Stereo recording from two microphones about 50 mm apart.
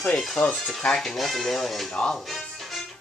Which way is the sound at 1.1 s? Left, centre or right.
Centre.